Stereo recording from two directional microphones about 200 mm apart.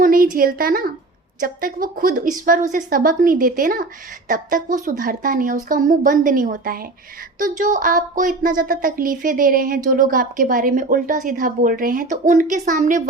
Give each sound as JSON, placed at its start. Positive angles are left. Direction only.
{"t": 0.0, "sound": "a woman's voice", "side_deg": -45}